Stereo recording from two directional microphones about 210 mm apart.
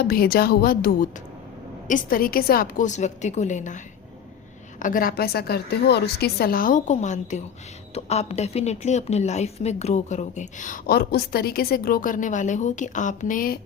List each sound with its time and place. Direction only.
0.0 s a woman's voice: 45° left (ahead or behind)
4.8 s a woman's voice: 40° left (ahead or behind)